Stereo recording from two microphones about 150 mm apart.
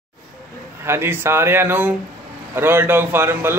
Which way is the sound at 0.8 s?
15° right (ahead or behind).